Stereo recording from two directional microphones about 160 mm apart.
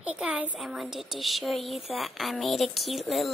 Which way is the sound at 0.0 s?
5° right (ahead or behind).